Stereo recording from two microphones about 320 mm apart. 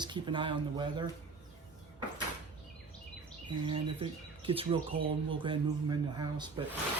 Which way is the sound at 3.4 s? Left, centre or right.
Centre.